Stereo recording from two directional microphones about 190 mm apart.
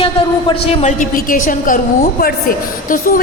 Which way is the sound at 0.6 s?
40° left (ahead or behind).